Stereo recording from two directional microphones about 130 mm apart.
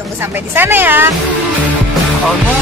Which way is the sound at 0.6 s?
15° right (ahead or behind).